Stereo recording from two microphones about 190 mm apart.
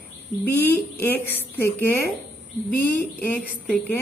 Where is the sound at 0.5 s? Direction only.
10° left (ahead or behind).